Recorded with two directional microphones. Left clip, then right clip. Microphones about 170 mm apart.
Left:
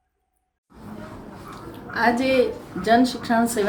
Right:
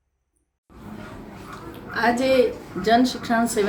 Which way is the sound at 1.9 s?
25° left (ahead or behind).